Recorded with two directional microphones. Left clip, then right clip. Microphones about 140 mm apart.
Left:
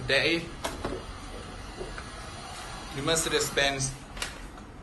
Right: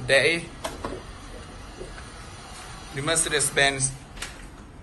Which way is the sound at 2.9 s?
25° left (ahead or behind).